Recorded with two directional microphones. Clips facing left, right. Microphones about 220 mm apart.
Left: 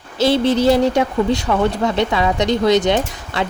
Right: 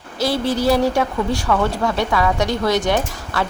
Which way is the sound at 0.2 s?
25° left (ahead or behind).